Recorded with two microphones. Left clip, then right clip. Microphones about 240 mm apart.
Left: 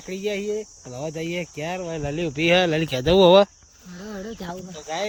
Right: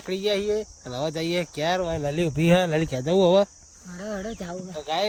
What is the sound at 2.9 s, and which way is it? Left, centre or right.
Speech, centre.